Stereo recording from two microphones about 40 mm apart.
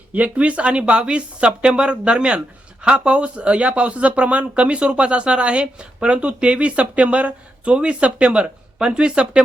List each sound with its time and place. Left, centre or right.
0.1 s speech: right